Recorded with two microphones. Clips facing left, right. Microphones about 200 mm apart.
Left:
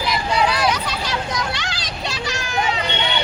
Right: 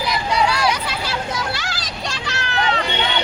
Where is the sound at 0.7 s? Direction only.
10° right (ahead or behind).